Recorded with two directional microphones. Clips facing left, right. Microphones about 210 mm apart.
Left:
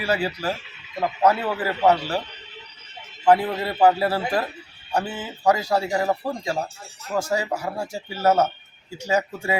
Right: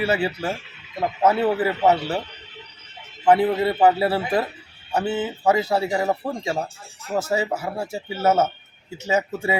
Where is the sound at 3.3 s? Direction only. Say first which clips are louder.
Right 2 dB; 20° right (ahead or behind).